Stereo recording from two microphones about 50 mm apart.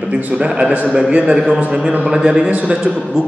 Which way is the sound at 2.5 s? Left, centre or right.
Right.